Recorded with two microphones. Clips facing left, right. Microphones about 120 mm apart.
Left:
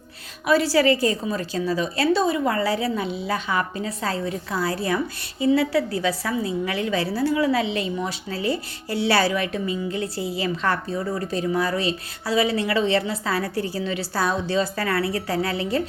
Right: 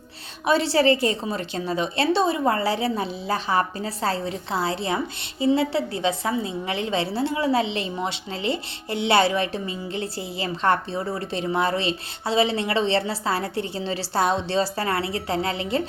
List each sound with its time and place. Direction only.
0.4 s speech: 25° right (ahead or behind)